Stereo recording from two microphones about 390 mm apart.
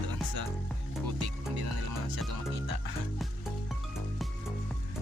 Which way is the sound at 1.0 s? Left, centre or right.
Right.